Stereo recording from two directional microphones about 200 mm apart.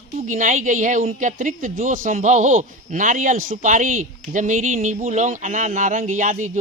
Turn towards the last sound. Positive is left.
turn(degrees=-40)  # may be behind; listen again after turning